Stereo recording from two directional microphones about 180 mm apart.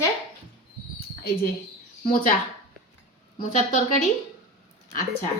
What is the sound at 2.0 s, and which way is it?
Speech, 50° left (ahead or behind).